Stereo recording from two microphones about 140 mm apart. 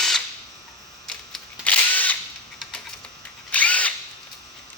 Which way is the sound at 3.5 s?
10° left (ahead or behind).